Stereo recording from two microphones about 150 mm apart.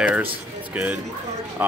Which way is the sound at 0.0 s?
10° right (ahead or behind).